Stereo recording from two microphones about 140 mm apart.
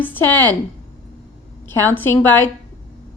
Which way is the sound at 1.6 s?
15° left (ahead or behind).